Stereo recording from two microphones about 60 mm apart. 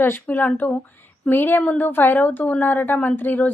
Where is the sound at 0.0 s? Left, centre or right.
Left.